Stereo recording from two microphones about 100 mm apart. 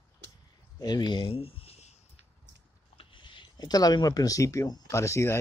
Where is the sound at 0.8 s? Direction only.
45° left (ahead or behind).